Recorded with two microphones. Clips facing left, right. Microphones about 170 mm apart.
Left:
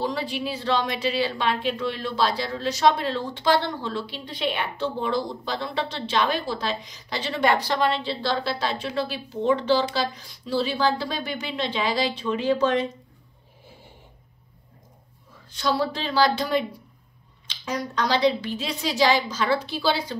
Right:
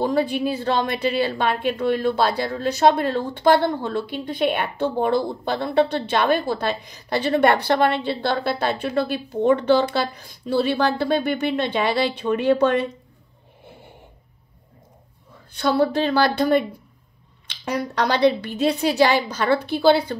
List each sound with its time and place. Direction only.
0.0 s a woman's voice: 50° right (ahead or behind)
15.6 s a woman's voice: 55° right (ahead or behind)